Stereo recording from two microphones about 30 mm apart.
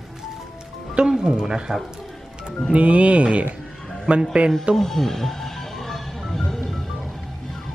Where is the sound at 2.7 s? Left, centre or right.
Right.